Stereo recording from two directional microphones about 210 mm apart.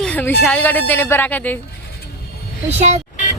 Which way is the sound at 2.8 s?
30° right (ahead or behind).